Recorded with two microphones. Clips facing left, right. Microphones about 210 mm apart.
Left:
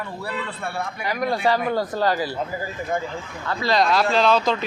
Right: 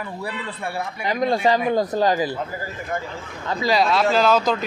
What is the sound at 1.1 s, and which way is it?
Speech, 20° right (ahead or behind).